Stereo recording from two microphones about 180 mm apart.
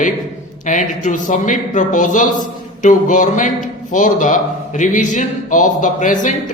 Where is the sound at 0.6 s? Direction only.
45° left (ahead or behind).